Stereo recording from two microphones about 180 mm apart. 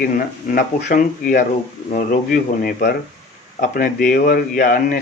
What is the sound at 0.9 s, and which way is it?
Speech, 45° left (ahead or behind).